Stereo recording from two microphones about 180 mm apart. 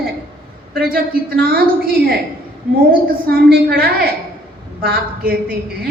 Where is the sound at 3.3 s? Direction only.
60° right (ahead or behind).